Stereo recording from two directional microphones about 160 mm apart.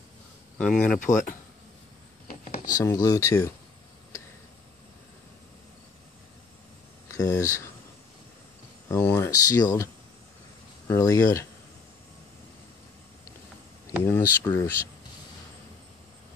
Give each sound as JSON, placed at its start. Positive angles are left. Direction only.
{"t": 0.6, "sound": "speech", "side_deg": 5}
{"t": 2.6, "sound": "speech", "side_deg": 20}
{"t": 7.1, "sound": "speech", "side_deg": 20}
{"t": 9.0, "sound": "speech", "side_deg": 15}
{"t": 10.9, "sound": "speech", "side_deg": 20}
{"t": 13.8, "sound": "speech", "side_deg": 15}